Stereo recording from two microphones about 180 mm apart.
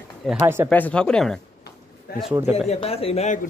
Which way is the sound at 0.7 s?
5° left (ahead or behind).